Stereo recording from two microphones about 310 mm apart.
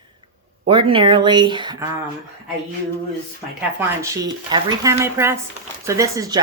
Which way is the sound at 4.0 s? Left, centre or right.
Centre.